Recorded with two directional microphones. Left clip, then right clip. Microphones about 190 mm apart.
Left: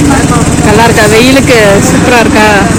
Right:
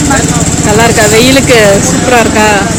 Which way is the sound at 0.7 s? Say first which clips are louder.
Left 1 dB; centre (ahead or behind).